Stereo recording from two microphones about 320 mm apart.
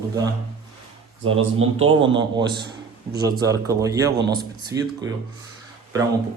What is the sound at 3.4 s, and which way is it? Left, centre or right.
A man's voice, centre.